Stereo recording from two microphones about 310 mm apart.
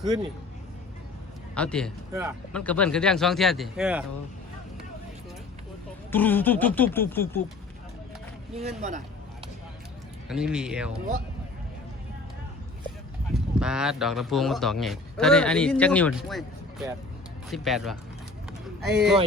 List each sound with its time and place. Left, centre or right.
1.5 s speech: centre
6.1 s speech: centre
8.5 s speech: right
10.2 s speech: centre
13.3 s speech: centre